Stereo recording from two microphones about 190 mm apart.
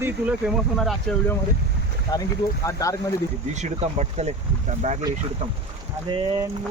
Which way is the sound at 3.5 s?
35° right (ahead or behind).